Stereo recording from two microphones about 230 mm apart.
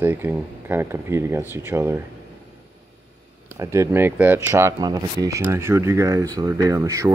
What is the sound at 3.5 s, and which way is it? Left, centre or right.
Speech, centre.